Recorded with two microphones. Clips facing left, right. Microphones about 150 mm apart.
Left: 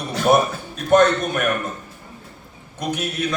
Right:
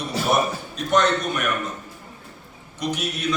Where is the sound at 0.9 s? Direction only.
50° left (ahead or behind).